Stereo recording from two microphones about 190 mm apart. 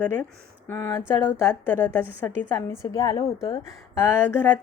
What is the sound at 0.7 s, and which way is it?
A woman's voice, 10° left (ahead or behind).